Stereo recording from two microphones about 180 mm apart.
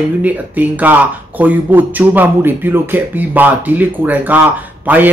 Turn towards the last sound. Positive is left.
turn(degrees=-10)  # may be behind; listen again after turning